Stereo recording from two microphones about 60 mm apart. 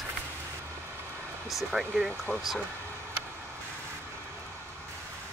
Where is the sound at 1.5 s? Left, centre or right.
Centre.